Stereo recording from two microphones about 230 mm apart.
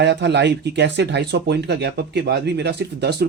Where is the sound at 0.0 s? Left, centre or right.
Right.